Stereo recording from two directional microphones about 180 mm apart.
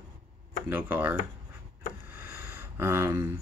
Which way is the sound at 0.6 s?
10° right (ahead or behind).